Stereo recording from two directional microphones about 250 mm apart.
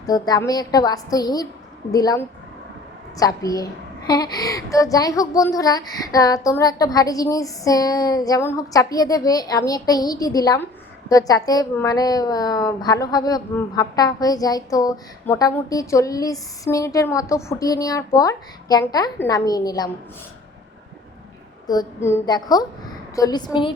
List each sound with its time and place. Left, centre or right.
0.0 s a woman's voice: centre
21.7 s a woman's voice: centre